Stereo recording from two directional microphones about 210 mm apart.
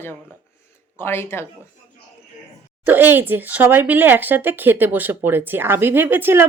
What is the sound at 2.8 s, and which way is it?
Speech, 10° right (ahead or behind).